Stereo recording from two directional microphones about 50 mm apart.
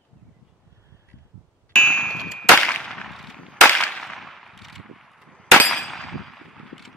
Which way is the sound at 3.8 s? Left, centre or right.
Centre.